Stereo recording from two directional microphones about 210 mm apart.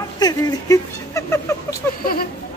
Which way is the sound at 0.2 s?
20° left (ahead or behind).